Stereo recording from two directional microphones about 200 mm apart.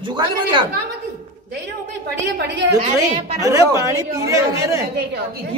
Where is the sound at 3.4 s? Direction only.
15° right (ahead or behind).